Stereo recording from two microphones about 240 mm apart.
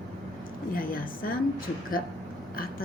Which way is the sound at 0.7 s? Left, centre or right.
Left.